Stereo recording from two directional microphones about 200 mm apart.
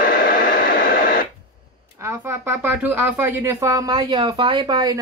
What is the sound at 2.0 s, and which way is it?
Speech, 10° right (ahead or behind).